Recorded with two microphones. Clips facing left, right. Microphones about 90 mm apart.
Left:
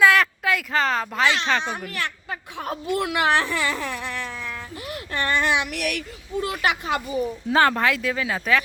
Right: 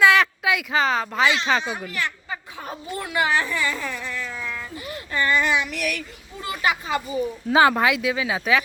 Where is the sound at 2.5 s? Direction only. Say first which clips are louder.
Left 9 dB; 70° left (ahead or behind).